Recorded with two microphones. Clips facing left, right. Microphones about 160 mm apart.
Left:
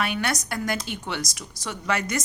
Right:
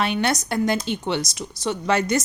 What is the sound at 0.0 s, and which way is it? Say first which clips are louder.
A woman's voice: right 4 dB; 25° right (ahead or behind).